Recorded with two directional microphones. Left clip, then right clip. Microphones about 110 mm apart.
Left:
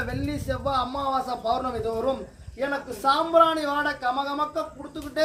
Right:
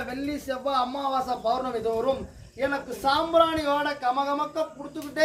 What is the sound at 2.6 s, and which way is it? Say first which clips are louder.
Speech: even; 15° left (ahead or behind).